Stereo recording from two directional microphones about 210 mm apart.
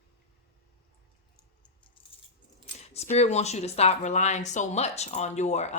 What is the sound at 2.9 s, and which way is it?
Speech, 30° left (ahead or behind).